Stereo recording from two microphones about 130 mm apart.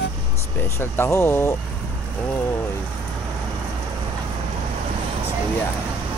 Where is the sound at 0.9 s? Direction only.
15° left (ahead or behind).